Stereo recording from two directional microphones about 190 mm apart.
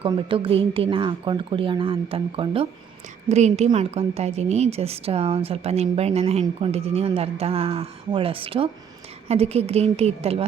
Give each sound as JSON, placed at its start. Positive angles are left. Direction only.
{"t": 0.0, "sound": "a woman's voice", "side_deg": -30}